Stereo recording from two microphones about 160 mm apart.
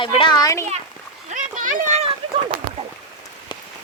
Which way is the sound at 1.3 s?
55° right (ahead or behind).